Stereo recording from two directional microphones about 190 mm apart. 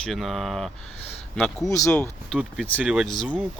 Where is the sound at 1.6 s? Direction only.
15° left (ahead or behind).